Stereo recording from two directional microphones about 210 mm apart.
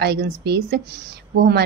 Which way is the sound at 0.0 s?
50° right (ahead or behind).